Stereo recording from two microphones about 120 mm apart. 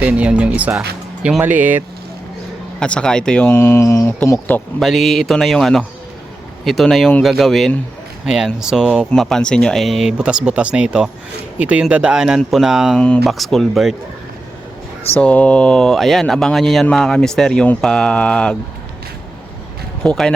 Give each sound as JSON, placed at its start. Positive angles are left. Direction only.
{"t": 0.0, "sound": "speech", "side_deg": -10}
{"t": 2.8, "sound": "speech", "side_deg": 10}
{"t": 3.5, "sound": "speech", "side_deg": 20}
{"t": 4.8, "sound": "speech", "side_deg": 0}
{"t": 15.2, "sound": "speech", "side_deg": 10}
{"t": 20.0, "sound": "speech", "side_deg": 5}